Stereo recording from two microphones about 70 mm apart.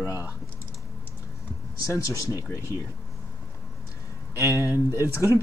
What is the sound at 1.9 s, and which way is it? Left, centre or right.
Speech, left.